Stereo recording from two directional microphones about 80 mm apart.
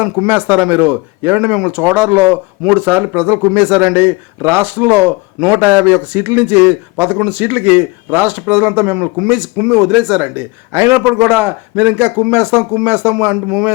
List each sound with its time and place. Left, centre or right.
0.3 s speech: centre
3.5 s speech: centre
9.1 s speech: centre
10.7 s a man's voice: right
11.0 s speech: centre